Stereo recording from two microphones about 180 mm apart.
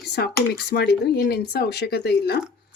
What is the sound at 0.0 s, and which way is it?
Speech, 65° left (ahead or behind).